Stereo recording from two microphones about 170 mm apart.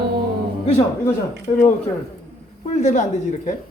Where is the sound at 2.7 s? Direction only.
45° left (ahead or behind).